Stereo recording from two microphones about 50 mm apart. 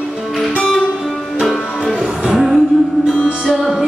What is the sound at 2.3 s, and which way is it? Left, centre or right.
Music, centre.